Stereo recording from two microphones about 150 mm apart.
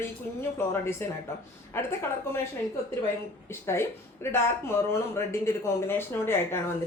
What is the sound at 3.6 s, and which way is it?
Speech, 15° left (ahead or behind).